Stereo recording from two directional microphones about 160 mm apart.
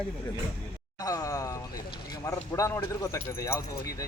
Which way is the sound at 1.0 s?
20° left (ahead or behind).